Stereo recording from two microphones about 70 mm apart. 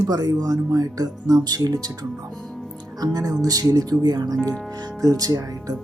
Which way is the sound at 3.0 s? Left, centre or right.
Right.